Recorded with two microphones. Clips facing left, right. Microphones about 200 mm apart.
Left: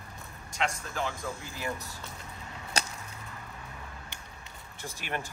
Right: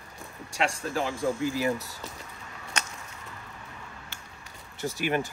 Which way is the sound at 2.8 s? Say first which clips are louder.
Left 2 dB; 35° left (ahead or behind).